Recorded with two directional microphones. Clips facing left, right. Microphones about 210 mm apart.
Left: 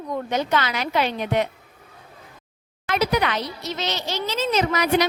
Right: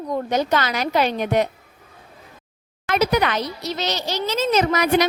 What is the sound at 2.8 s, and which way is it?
Speech, 45° right (ahead or behind).